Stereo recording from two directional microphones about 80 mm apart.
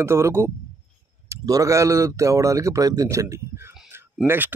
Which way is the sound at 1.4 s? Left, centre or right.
Right.